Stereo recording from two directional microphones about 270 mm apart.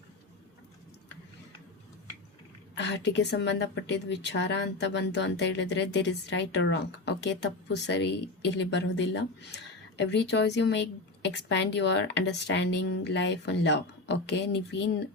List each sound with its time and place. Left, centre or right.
2.7 s a woman's voice: left